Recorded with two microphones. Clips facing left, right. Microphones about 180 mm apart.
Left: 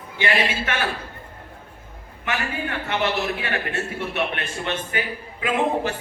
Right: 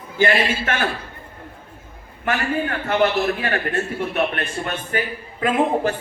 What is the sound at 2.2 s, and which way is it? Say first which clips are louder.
Speech: right 5 dB; 45° right (ahead or behind).